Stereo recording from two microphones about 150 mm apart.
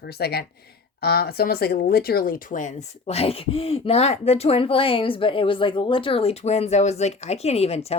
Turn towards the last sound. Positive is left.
turn(degrees=45)  # may be behind; listen again after turning